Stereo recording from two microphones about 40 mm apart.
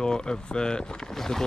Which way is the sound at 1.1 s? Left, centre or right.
Centre.